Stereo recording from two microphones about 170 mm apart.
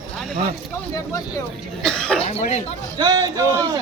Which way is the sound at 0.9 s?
20° left (ahead or behind).